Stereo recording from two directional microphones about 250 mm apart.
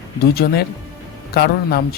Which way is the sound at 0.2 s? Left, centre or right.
Left.